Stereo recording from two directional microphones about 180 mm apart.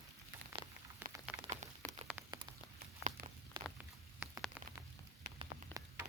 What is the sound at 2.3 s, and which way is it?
Rain on surface, 20° right (ahead or behind).